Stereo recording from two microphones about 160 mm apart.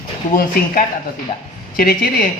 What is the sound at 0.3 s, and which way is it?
Speech, 65° left (ahead or behind).